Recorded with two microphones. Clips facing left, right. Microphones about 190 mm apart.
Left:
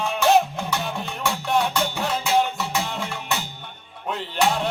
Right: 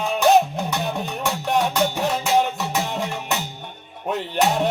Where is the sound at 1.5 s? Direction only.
40° right (ahead or behind).